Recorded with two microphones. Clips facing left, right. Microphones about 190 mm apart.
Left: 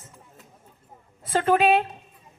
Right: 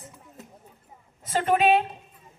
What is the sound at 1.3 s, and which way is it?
Speech, 20° right (ahead or behind).